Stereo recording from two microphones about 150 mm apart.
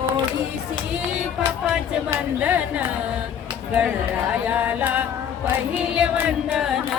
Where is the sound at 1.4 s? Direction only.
5° right (ahead or behind).